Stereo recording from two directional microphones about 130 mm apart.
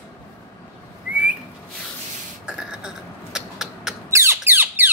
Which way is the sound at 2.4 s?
5° right (ahead or behind).